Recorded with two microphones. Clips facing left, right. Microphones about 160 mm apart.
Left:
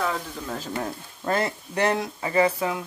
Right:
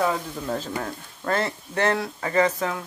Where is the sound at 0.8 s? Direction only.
20° left (ahead or behind).